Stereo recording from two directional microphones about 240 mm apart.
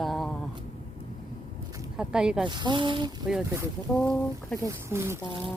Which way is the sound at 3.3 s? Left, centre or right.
Centre.